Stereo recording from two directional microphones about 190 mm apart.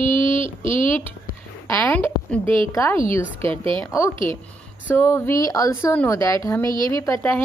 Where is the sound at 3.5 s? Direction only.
30° right (ahead or behind).